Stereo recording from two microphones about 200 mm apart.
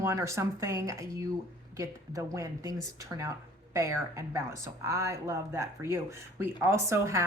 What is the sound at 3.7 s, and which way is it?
Speech, 15° right (ahead or behind).